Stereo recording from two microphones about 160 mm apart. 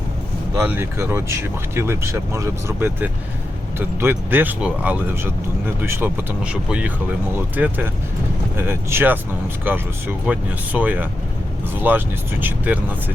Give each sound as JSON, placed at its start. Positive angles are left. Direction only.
{"t": 0.6, "sound": "speech", "side_deg": -15}